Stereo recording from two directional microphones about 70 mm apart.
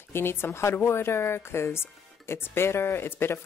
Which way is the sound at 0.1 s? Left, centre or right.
Left.